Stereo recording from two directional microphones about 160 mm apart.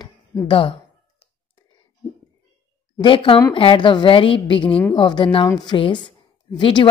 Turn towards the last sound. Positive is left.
turn(degrees=30)  # may be behind; listen again after turning